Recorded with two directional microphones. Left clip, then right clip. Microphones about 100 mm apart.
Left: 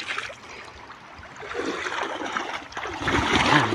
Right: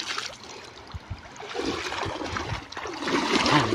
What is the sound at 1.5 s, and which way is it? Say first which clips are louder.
Boat: left 1 dB; 65° right (ahead or behind).